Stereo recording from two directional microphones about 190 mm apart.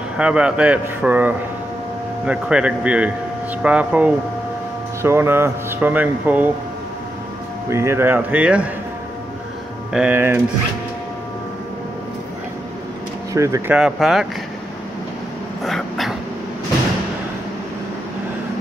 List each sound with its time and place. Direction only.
0.2 s a man's voice: 5° right (ahead or behind)
7.7 s speech: 15° right (ahead or behind)
9.9 s speech: 10° right (ahead or behind)
13.3 s speech: 15° right (ahead or behind)
13.7 s a man's voice: centre (ahead or behind)
15.6 s dog: centre (ahead or behind)